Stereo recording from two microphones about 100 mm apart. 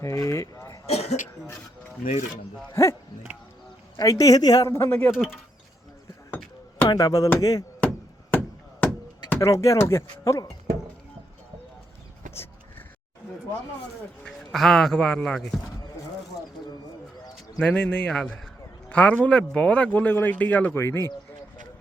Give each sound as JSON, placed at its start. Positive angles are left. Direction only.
{"t": 0.0, "sound": "a sound", "side_deg": 30}
{"t": 0.9, "sound": "cough", "side_deg": 90}
{"t": 3.9, "sound": "speech", "side_deg": 35}
{"t": 5.1, "sound": "speech", "side_deg": -5}
{"t": 6.8, "sound": "speech", "side_deg": 40}
{"t": 7.8, "sound": "chop", "side_deg": 15}
{"t": 9.4, "sound": "speech", "side_deg": 30}
{"t": 14.3, "sound": "speech", "side_deg": 0}
{"t": 17.6, "sound": "speech", "side_deg": 15}